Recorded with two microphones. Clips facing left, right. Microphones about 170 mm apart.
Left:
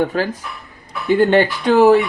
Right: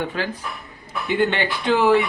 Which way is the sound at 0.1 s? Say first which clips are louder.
Left 6 dB; 45° left (ahead or behind).